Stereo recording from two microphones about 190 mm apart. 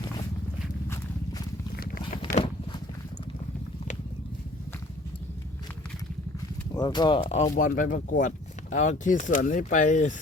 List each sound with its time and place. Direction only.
1.7 s a sound: 55° left (ahead or behind)
6.7 s speech: 25° left (ahead or behind)
7.5 s speech: 45° left (ahead or behind)